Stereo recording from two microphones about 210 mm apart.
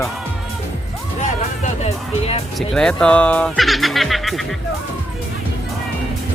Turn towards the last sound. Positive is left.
turn(degrees=0)  # may be behind; listen again after turning